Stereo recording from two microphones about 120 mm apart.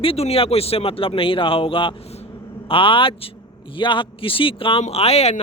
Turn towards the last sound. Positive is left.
turn(degrees=60)  # may be behind; listen again after turning